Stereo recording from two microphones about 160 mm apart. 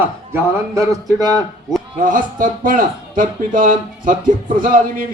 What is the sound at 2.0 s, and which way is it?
A man's voice, 60° right (ahead or behind).